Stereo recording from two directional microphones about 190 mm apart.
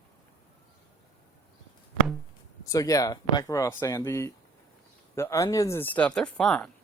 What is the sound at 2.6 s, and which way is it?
Speech, 20° left (ahead or behind).